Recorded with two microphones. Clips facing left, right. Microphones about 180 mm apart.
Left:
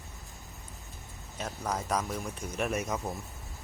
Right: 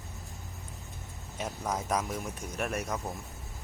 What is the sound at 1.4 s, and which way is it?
Speech, 5° right (ahead or behind).